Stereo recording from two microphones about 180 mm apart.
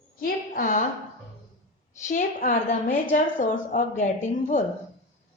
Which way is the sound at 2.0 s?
45° left (ahead or behind).